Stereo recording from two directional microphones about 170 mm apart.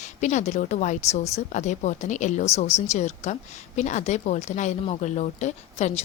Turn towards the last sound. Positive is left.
turn(degrees=40)  # may be behind; listen again after turning